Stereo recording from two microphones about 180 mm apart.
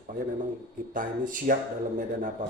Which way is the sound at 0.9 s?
50° right (ahead or behind).